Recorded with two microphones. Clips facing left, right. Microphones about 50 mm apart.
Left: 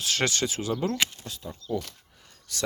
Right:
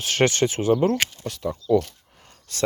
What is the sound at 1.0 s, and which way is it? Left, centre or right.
Speech, right.